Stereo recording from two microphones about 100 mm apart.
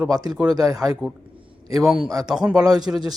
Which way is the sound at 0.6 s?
35° right (ahead or behind).